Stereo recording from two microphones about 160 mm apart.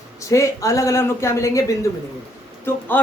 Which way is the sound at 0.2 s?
20° left (ahead or behind).